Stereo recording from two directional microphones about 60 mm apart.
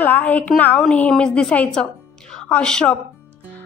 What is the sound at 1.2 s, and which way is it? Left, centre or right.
A woman's voice, centre.